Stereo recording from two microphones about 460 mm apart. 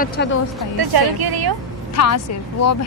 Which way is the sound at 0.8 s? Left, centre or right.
Right.